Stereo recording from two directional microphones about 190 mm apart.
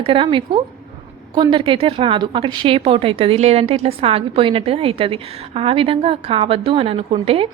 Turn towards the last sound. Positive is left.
turn(degrees=-30)  # may be behind; listen again after turning